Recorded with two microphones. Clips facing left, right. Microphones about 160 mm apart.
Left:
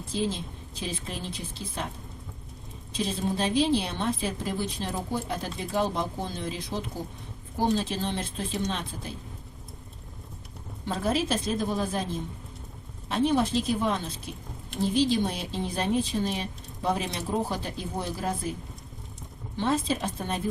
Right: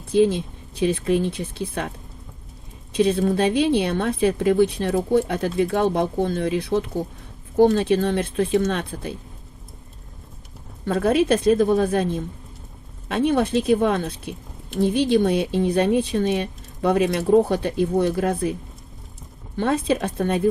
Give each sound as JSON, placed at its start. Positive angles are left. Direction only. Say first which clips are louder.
{"t": 0.1, "sound": "speech", "louder": "right 12 dB", "side_deg": -60}
{"t": 2.9, "sound": "speech", "louder": "right 10 dB", "side_deg": -60}
{"t": 10.8, "sound": "speech", "louder": "right 9 dB", "side_deg": -60}
{"t": 19.5, "sound": "speech", "louder": "right 6 dB", "side_deg": -60}